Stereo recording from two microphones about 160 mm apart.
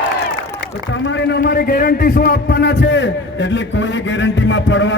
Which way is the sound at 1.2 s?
80° left.